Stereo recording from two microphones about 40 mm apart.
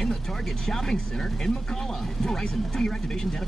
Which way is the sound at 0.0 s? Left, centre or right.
Centre.